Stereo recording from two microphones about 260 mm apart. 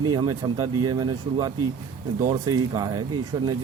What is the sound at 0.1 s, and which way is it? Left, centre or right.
A man's voice, centre.